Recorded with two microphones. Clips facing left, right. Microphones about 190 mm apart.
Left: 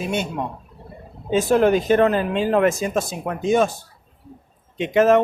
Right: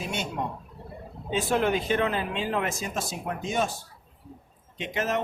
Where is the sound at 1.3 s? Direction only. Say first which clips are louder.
Left 8 dB; 45° left (ahead or behind).